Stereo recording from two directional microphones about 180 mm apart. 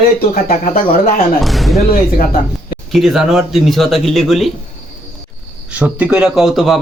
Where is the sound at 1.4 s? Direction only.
Centre (ahead or behind).